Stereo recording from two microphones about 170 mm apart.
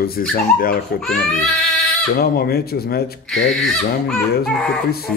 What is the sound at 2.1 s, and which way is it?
Speech, 65° left (ahead or behind).